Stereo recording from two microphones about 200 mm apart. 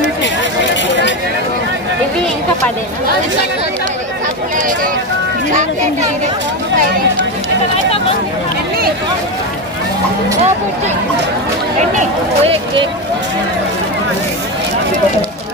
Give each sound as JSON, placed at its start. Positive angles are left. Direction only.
{"t": 11.8, "sound": "speech", "side_deg": -35}